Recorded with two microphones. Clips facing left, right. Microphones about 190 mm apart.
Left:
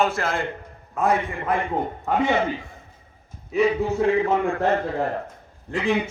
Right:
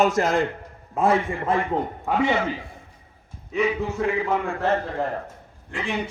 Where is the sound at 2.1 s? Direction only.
5° right (ahead or behind).